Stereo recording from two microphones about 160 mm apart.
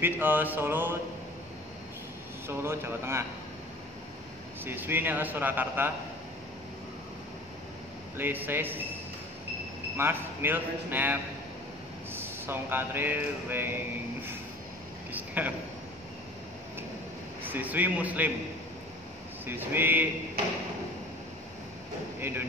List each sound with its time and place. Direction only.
0.0 s speech: 10° right (ahead or behind)
2.4 s speech: 15° right (ahead or behind)
4.6 s speech: 15° right (ahead or behind)
8.2 s speech: 10° right (ahead or behind)
9.9 s speech: 15° right (ahead or behind)
15.1 s a sound: 10° right (ahead or behind)
17.5 s speech: 10° right (ahead or behind)
19.4 s speech: 15° right (ahead or behind)